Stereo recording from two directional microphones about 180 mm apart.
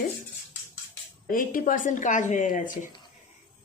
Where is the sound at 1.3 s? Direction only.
50° left (ahead or behind).